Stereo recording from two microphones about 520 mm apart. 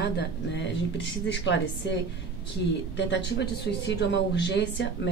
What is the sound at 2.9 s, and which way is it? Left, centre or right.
Speech, left.